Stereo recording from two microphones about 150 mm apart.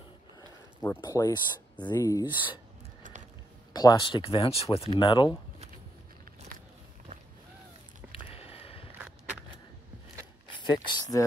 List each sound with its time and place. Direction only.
1.0 s speech: 25° left (ahead or behind)
2.2 s speech: 10° right (ahead or behind)
3.7 s speech: 30° left (ahead or behind)
8.1 s a sound: 40° left (ahead or behind)
10.6 s speech: 30° left (ahead or behind)